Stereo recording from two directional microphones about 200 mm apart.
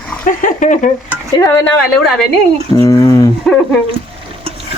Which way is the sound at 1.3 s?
15° left (ahead or behind).